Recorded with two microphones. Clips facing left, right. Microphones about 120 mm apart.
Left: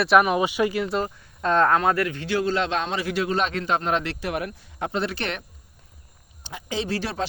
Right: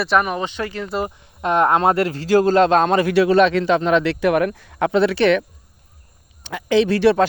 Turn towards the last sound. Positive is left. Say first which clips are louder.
# right 13 dB
turn(degrees=-65)  # may be behind; listen again after turning